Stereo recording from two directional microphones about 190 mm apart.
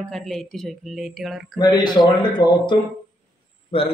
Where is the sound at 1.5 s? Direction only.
20° left (ahead or behind).